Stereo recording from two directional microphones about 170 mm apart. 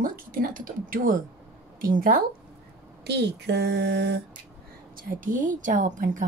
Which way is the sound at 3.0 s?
80° right.